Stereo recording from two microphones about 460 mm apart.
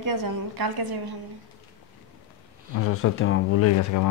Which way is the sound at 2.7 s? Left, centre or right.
Left.